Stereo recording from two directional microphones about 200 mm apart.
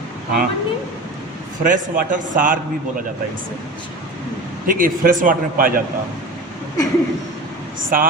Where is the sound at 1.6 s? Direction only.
40° right (ahead or behind).